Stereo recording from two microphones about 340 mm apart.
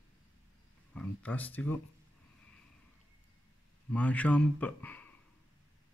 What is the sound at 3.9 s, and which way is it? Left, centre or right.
Speech, centre.